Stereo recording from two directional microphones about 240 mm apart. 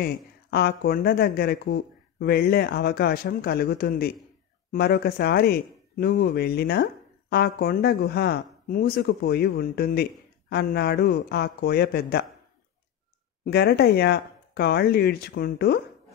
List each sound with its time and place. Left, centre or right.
0.0 s speech: left
13.5 s speech: left